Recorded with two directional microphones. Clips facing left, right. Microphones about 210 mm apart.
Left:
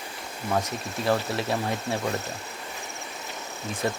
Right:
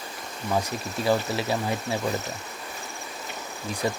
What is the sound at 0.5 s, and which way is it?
Speech, centre (ahead or behind).